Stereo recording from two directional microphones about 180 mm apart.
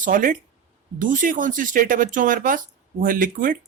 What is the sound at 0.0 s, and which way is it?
Speech, 50° right (ahead or behind).